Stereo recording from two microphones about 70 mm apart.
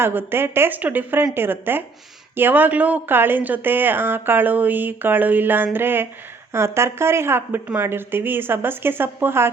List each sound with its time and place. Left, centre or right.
0.0 s speech: right